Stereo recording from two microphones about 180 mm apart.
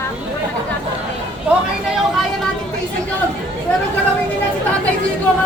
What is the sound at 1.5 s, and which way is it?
Speech, 10° right (ahead or behind).